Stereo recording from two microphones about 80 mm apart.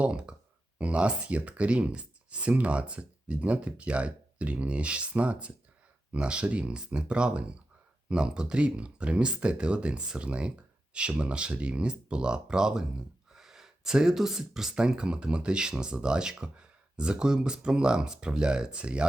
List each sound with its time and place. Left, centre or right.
0.0 s speech: centre